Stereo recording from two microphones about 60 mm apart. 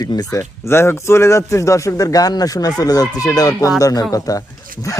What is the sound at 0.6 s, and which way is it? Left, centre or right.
Speech, left.